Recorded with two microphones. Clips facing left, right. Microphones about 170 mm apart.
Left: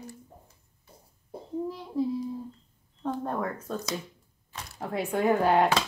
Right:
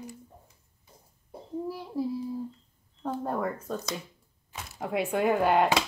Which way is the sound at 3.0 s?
10° right (ahead or behind).